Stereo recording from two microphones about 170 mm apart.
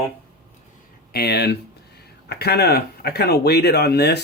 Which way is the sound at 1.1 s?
70° left (ahead or behind).